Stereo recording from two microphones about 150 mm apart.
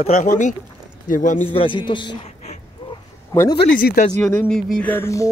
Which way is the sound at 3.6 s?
90° left.